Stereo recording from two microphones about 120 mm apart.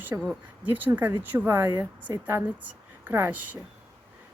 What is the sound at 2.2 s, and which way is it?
Speech, 15° right (ahead or behind).